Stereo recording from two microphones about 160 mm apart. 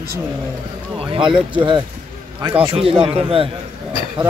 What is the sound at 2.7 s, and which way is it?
Speech, 35° right (ahead or behind).